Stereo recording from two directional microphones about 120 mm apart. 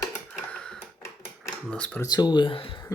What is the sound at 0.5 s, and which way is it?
Typewriter, 10° left (ahead or behind).